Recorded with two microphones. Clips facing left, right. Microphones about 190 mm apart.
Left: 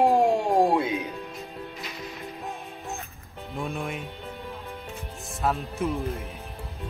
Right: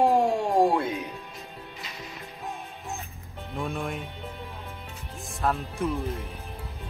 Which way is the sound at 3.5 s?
Centre (ahead or behind).